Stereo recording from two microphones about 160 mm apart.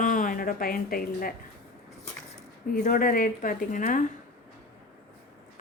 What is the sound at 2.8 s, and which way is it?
A woman's voice, 55° left (ahead or behind).